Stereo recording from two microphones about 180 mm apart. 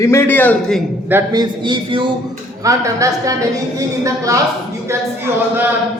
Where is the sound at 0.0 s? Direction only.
15° left (ahead or behind).